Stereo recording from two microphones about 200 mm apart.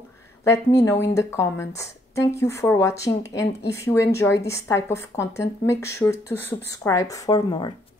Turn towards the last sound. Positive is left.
turn(degrees=20)  # may be behind; listen again after turning